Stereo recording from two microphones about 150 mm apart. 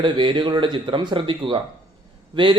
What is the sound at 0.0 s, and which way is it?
A man's voice, 30° right (ahead or behind).